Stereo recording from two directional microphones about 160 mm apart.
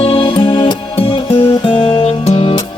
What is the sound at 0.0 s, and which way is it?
Music, 35° left (ahead or behind).